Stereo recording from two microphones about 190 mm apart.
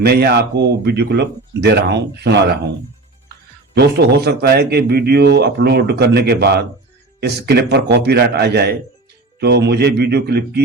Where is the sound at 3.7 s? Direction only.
60° right (ahead or behind).